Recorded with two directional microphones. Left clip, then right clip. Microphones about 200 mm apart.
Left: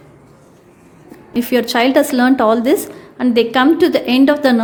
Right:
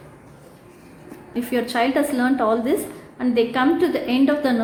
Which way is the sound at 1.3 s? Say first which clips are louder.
Left 7 dB; 55° left (ahead or behind).